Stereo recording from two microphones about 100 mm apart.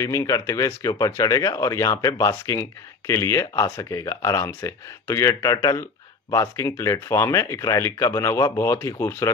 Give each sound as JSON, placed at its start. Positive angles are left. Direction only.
{"t": 0.0, "sound": "speech", "side_deg": 30}